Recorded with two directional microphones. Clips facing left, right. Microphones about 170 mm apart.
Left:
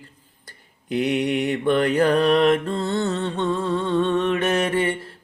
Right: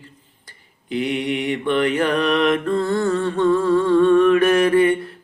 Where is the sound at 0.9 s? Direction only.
45° left (ahead or behind).